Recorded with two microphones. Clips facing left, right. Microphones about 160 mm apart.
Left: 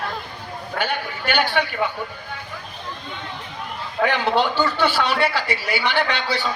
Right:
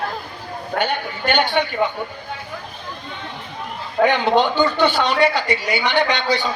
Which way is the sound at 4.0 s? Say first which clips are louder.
Right 5 dB; 45° right (ahead or behind).